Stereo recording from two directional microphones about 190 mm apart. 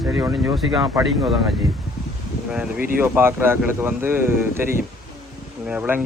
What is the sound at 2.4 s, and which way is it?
Speech, 5° right (ahead or behind).